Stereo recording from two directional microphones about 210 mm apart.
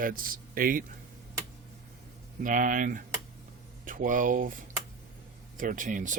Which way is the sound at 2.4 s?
40° right (ahead or behind).